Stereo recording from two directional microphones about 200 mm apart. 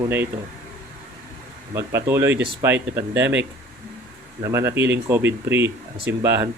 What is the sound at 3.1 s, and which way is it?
Speech, 60° right (ahead or behind).